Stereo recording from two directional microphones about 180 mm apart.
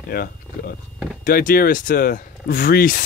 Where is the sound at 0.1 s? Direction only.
55° left (ahead or behind).